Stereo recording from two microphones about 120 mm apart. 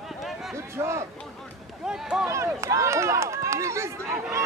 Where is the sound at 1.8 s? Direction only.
5° right (ahead or behind).